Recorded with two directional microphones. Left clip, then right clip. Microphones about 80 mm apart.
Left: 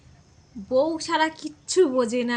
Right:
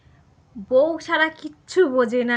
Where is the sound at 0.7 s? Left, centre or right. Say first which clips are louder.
Right 4 dB; left.